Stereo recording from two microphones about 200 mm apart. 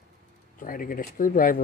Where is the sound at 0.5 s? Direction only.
45° left (ahead or behind).